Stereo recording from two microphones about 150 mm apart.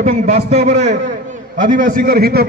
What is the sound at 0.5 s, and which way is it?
Speech, 50° right (ahead or behind).